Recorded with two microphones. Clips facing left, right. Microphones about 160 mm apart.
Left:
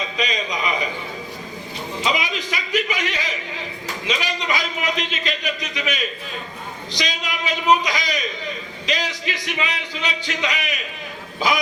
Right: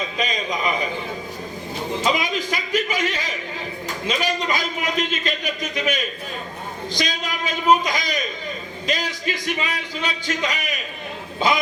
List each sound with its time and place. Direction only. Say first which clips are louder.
0.2 s a man's voice: even; 45° right (ahead or behind)
2.0 s a man's voice: right 1 dB; 45° right (ahead or behind)
11.3 s speech: right 1 dB; 25° right (ahead or behind)